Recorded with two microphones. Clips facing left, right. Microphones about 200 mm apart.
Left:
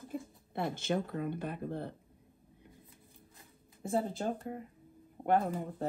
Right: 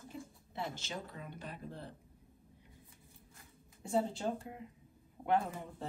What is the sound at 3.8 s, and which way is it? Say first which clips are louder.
A woman's voice: left 1 dB; 50° left (ahead or behind).